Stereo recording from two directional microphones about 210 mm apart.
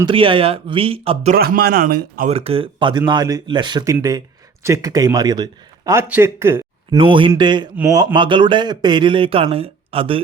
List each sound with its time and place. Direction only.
0.0 s speech: 25° right (ahead or behind)
1.4 s speech: 45° right (ahead or behind)
2.3 s a man's voice: 30° right (ahead or behind); by 7.0 s 10° right (ahead or behind)
7.0 s speech: 25° right (ahead or behind)